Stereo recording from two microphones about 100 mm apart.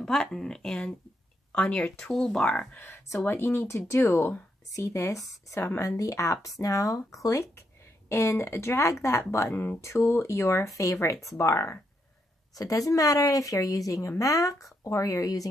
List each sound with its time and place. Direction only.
0.0 s speech: 5° left (ahead or behind)
2.8 s speech: 25° left (ahead or behind)